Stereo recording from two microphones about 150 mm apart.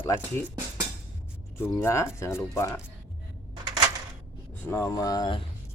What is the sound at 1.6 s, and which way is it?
Speech, 15° left (ahead or behind).